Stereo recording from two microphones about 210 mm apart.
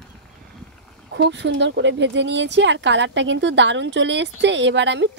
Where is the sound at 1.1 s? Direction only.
55° right (ahead or behind).